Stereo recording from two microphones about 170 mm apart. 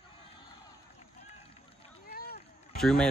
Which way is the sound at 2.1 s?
60° left (ahead or behind).